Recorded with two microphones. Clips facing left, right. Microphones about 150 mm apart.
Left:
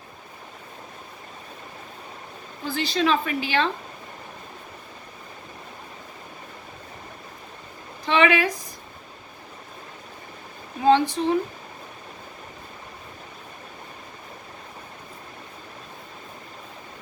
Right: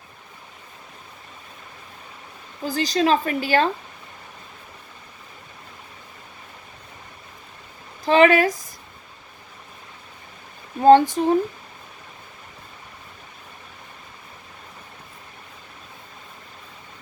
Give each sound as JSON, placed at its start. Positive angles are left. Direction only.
{"t": 2.6, "sound": "a woman's voice", "side_deg": -40}
{"t": 8.0, "sound": "a woman's voice", "side_deg": -40}
{"t": 10.8, "sound": "speech", "side_deg": -45}